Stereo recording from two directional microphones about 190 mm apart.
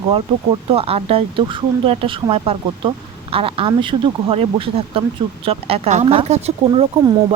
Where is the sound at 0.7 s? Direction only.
30° right (ahead or behind).